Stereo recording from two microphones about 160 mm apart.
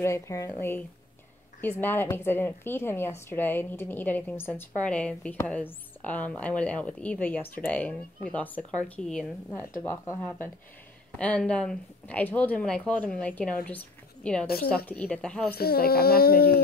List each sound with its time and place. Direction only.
0.0 s a woman's voice: 20° left (ahead or behind)
9.5 s a woman's voice: 15° left (ahead or behind)
15.5 s speech: 75° left (ahead or behind)